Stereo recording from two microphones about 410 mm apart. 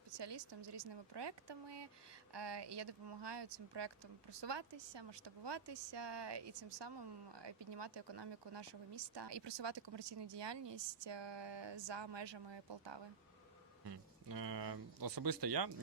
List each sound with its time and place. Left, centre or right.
0.1 s speech: right
13.8 s speech: right